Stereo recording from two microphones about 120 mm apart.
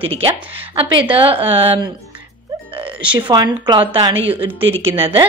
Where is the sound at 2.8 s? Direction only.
45° right (ahead or behind).